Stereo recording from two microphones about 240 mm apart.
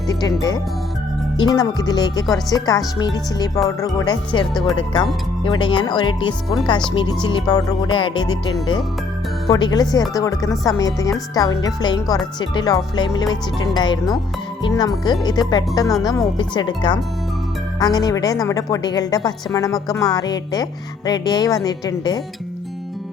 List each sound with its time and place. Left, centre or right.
1.4 s a woman's voice: centre
9.5 s a woman's voice: centre